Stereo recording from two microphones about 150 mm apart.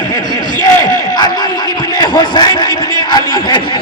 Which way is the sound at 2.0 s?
25° left (ahead or behind).